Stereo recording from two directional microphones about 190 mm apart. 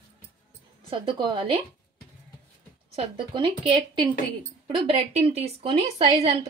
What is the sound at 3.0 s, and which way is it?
Speech, 25° right (ahead or behind).